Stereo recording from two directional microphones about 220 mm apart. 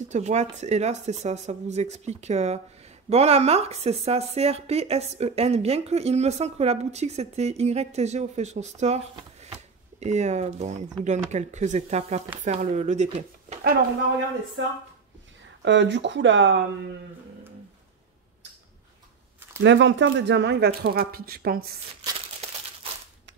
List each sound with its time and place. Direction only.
0.1 s speech: 30° right (ahead or behind)
15.6 s speech: 55° right (ahead or behind)
19.6 s speech: 55° right (ahead or behind)